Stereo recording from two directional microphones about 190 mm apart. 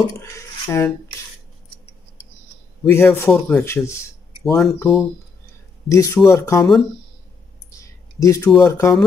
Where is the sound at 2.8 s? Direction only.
10° left (ahead or behind).